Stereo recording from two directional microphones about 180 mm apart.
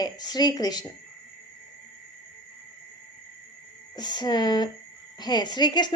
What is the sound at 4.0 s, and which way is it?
A woman's voice, 25° left (ahead or behind).